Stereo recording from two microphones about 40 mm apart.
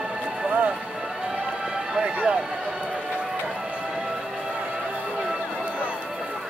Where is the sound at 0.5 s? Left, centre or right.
Right.